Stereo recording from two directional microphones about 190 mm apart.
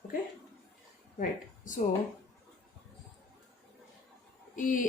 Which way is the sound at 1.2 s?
45° left (ahead or behind).